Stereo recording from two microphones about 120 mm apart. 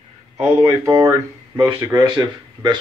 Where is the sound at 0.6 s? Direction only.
30° right (ahead or behind).